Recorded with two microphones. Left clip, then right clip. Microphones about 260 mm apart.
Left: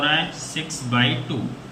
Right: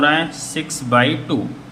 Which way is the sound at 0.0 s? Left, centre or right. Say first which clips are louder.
Right 5 dB; centre.